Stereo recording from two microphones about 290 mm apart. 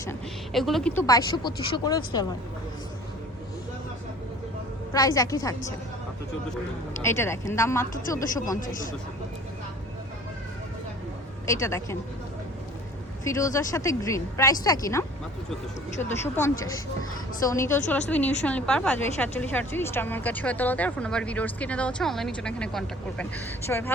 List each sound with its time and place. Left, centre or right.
0.1 s speech: centre
4.9 s speech: centre
7.0 s speech: centre
8.6 s speech: left
11.4 s speech: centre
13.2 s a woman's voice: centre